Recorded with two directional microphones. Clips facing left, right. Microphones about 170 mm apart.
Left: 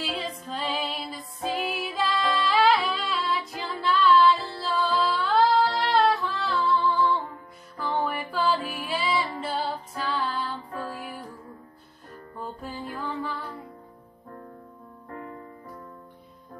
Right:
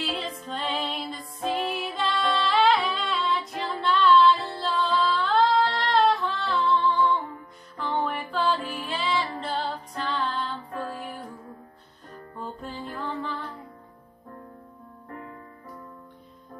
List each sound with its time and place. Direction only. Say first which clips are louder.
0.0 s music: right 1 dB; centre (ahead or behind)
12.4 s music: even; 10° left (ahead or behind)